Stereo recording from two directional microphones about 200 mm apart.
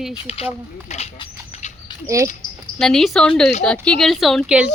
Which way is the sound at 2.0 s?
15° right (ahead or behind).